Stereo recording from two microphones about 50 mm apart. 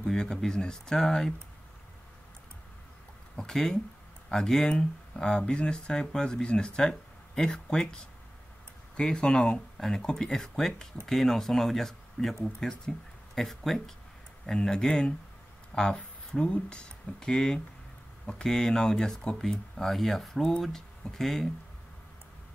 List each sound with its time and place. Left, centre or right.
0.0 s speech: centre
3.3 s speech: centre
16.0 s speech: left; by 21.5 s centre